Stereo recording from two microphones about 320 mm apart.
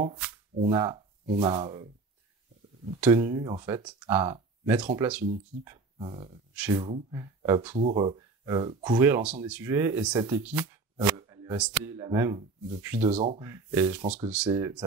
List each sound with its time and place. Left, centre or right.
0.7 s speech: centre
3.0 s speech: centre
6.5 s speech: centre
13.1 s speech: centre